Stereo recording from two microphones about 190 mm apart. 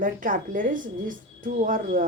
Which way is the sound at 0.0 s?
45° right (ahead or behind).